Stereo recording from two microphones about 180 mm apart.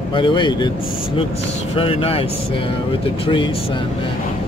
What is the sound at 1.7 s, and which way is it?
Speech, 30° left (ahead or behind).